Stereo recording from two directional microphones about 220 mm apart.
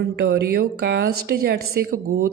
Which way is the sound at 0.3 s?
45° right (ahead or behind).